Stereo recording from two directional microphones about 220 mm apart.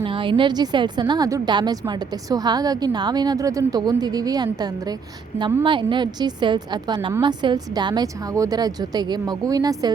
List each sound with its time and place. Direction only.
0.0 s a woman's voice: 20° right (ahead or behind)